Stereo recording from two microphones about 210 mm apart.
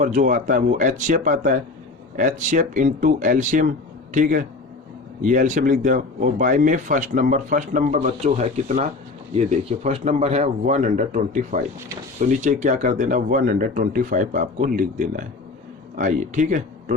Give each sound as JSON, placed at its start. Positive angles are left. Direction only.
{"t": 0.0, "sound": "speech", "side_deg": -40}